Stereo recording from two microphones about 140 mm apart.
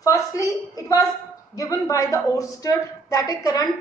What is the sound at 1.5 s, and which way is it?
A woman's voice, 25° left (ahead or behind).